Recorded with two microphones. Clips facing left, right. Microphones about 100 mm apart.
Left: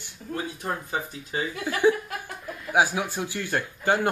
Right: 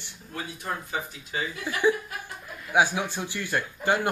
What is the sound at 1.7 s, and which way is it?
Speech, 15° left (ahead or behind).